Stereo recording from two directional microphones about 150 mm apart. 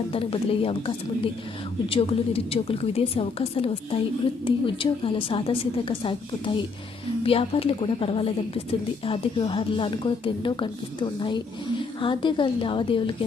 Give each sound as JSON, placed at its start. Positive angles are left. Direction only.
{"t": 0.1, "sound": "a woman's voice", "side_deg": 40}